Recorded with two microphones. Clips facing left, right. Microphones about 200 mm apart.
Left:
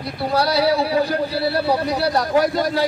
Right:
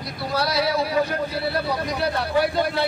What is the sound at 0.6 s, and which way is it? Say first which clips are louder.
Speech: left 2 dB; 30° left (ahead or behind).